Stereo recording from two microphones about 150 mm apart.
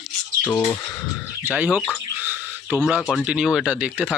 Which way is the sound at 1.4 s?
10° right (ahead or behind).